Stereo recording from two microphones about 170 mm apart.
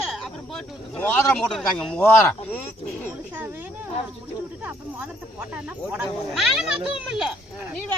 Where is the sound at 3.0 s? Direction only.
10° right (ahead or behind).